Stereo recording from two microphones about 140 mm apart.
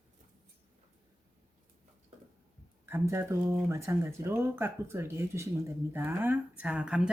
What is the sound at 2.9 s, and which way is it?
Speech, 15° right (ahead or behind).